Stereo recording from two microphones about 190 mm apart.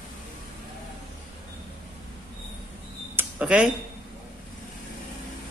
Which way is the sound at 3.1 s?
5° right (ahead or behind).